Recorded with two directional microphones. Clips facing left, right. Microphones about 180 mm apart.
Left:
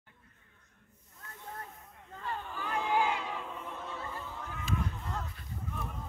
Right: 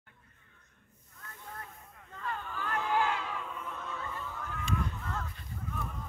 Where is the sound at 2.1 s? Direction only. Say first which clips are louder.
Even; 30° left (ahead or behind).